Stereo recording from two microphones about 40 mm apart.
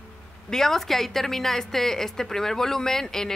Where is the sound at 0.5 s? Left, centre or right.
Centre.